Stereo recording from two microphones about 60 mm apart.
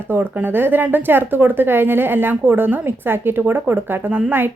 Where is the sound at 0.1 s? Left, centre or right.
Right.